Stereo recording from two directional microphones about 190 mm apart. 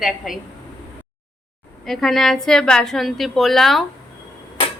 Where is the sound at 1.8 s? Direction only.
Centre (ahead or behind).